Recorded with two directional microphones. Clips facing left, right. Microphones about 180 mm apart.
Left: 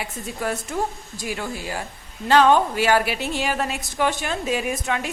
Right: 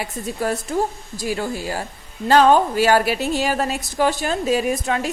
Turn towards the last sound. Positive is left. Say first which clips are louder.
# right 4 dB
turn(degrees=-35)  # may be behind; listen again after turning